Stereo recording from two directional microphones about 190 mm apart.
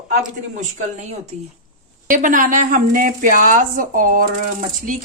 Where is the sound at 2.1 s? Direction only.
45° right (ahead or behind).